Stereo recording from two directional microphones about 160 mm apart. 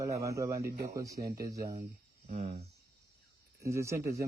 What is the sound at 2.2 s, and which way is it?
Speech, 45° right (ahead or behind).